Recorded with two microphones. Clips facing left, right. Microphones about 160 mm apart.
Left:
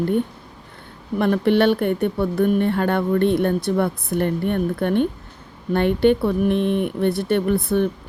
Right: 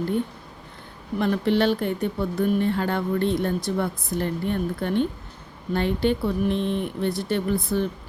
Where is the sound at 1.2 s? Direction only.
60° left (ahead or behind).